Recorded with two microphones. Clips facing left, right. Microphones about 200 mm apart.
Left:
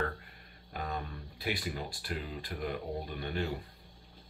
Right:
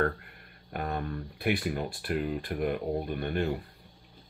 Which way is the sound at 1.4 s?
60° right (ahead or behind).